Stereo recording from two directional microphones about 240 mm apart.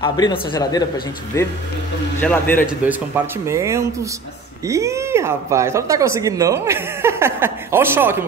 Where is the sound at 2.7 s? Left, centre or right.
Centre.